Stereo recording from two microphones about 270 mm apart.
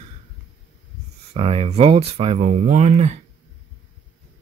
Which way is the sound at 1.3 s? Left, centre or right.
Right.